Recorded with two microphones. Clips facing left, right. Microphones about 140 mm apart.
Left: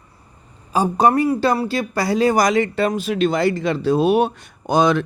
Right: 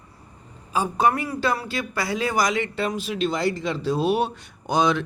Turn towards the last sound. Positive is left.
turn(degrees=50)  # may be behind; listen again after turning